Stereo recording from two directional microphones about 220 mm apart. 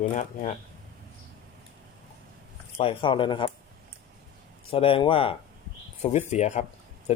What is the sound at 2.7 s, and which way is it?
Speech, 25° left (ahead or behind).